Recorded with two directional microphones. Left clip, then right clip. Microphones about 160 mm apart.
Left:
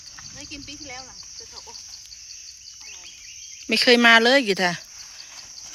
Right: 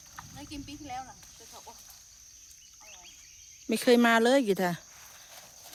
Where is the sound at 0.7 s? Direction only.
85° right.